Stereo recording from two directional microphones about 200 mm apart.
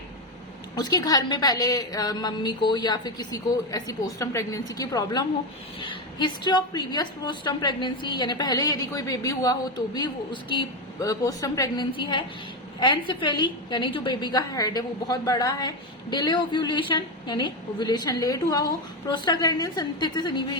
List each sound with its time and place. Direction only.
0.8 s a woman's voice: 20° left (ahead or behind)